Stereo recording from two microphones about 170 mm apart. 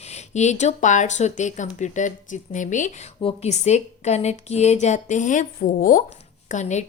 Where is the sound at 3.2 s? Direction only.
35° left (ahead or behind).